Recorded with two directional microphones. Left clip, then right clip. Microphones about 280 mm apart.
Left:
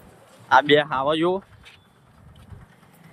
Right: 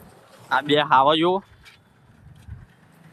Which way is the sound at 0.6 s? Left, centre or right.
Centre.